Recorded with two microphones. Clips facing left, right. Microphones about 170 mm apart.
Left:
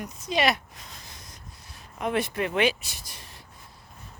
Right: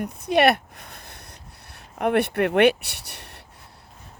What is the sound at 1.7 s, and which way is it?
Speech, 65° right (ahead or behind).